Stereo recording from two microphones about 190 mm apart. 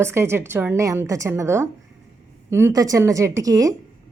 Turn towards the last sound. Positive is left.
turn(degrees=-20)  # may be behind; listen again after turning